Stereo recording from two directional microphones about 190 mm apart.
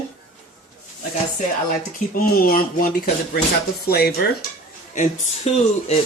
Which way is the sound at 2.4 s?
50° left (ahead or behind).